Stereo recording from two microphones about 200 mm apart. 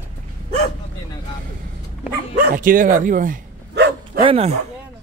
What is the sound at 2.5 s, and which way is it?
Speech, 45° right (ahead or behind).